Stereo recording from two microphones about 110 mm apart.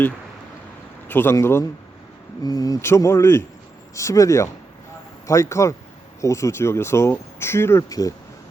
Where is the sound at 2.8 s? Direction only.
25° left (ahead or behind).